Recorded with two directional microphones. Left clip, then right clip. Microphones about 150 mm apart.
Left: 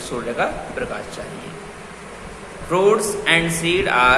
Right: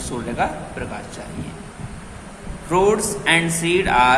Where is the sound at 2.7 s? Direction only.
30° right (ahead or behind).